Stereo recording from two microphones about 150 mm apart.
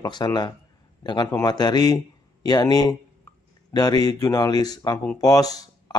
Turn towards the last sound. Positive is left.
turn(degrees=25)  # may be behind; listen again after turning